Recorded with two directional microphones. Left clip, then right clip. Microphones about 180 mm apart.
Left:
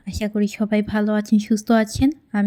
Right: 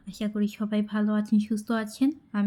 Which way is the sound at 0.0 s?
30° left (ahead or behind).